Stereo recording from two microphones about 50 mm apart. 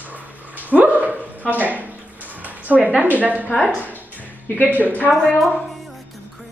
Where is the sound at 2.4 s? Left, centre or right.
Right.